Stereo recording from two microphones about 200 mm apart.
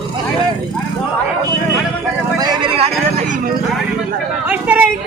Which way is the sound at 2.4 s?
25° right (ahead or behind).